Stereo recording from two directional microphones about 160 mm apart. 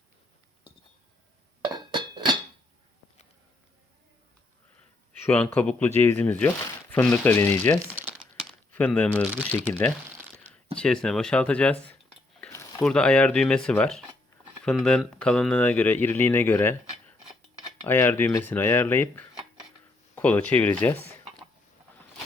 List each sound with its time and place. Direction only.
1.7 s music: 30° right (ahead or behind)
5.2 s speech: 10° left (ahead or behind)
10.3 s a sound: 10° left (ahead or behind)
10.8 s speech: 5° left (ahead or behind)
17.8 s speech: 10° left (ahead or behind)